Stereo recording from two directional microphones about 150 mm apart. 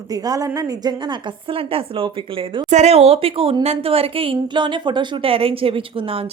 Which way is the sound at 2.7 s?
45° right (ahead or behind).